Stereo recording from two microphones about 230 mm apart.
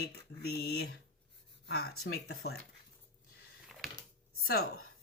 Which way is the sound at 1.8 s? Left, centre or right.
Left.